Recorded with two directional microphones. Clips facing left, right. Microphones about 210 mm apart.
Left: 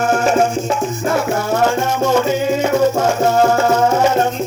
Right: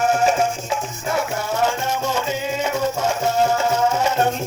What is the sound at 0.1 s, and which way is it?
Music, 80° left.